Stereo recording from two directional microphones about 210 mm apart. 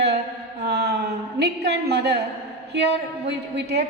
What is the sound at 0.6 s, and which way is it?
A woman's voice, 50° right (ahead or behind).